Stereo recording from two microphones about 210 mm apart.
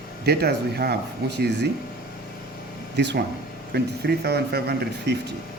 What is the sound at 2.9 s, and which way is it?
Speech, 55° right (ahead or behind).